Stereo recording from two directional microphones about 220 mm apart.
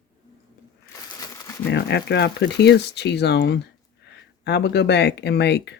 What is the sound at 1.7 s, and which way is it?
Speech, 50° left (ahead or behind).